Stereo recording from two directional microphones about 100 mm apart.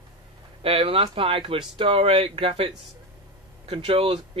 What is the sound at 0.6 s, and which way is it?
Speech, 65° right (ahead or behind).